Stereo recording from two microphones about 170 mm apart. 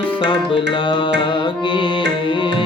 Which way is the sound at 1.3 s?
30° left (ahead or behind).